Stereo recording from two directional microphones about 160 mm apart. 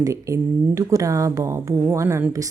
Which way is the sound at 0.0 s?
20° right (ahead or behind).